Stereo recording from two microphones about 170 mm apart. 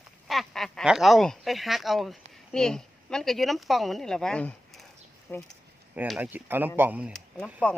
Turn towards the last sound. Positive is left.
turn(degrees=5)  # may be behind; listen again after turning